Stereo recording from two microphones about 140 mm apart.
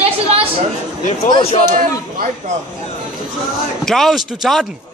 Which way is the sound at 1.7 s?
80° right.